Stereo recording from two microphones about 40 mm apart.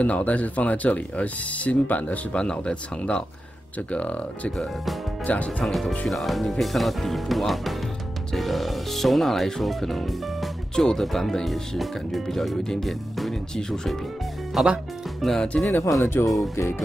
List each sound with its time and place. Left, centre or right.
0.0 s speech: left
2.3 s speech: left
5.6 s speech: centre
14.6 s speech: centre
15.7 s speech: left